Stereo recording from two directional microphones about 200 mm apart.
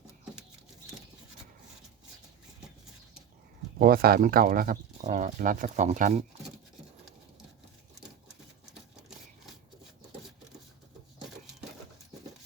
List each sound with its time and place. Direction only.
3.8 s speech: 45° right (ahead or behind)